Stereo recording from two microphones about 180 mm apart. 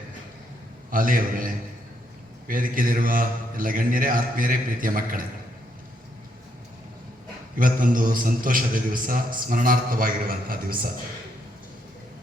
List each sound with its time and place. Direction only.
0.9 s a man's voice: 50° right (ahead or behind)
7.6 s a man's voice: 50° right (ahead or behind)